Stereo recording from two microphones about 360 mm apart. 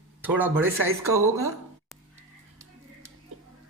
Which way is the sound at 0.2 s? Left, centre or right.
Centre.